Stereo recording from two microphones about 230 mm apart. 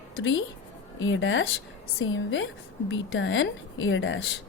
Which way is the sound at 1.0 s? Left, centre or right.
Left.